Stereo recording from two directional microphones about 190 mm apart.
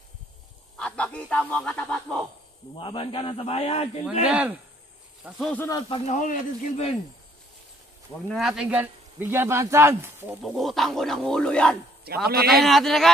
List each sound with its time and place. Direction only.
0.7 s speech: 5° left (ahead or behind)
2.8 s a man's voice: 25° left (ahead or behind)
4.3 s speech: 5° right (ahead or behind)
5.6 s speech: 15° left (ahead or behind)
5.9 s a man's voice: 30° left (ahead or behind)
6.1 s speech: 40° left (ahead or behind)
8.3 s speech: centre (ahead or behind)
10.4 s speech: centre (ahead or behind)
12.1 s a man's voice: 55° right (ahead or behind)
12.4 s speech: centre (ahead or behind)